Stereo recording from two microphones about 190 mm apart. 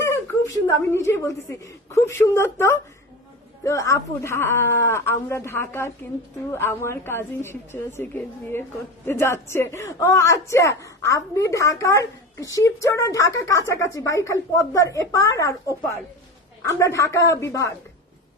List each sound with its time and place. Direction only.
0.9 s a woman's voice: 15° left (ahead or behind)